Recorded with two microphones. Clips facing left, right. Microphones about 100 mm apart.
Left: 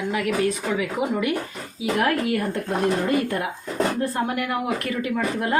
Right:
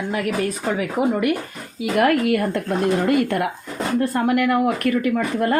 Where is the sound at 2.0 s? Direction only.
65° right (ahead or behind).